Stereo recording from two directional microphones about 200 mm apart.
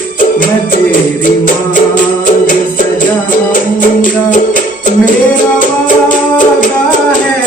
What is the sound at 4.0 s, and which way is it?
Music, 40° left (ahead or behind).